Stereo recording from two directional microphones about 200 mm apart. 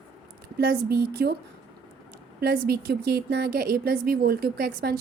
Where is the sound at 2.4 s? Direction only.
50° right (ahead or behind).